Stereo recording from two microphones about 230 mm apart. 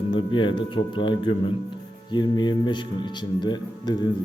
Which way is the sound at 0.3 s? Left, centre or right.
Left.